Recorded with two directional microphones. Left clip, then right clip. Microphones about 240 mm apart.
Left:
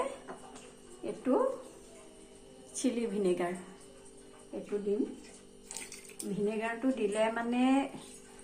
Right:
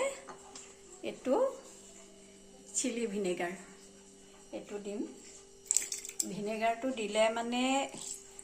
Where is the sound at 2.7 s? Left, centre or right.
Right.